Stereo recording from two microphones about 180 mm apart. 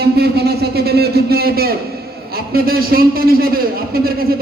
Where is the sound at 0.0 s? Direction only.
60° right (ahead or behind).